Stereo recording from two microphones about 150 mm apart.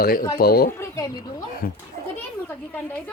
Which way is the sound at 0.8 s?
25° left (ahead or behind).